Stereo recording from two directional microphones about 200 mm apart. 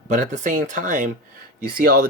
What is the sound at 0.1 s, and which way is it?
Speech, 35° right (ahead or behind).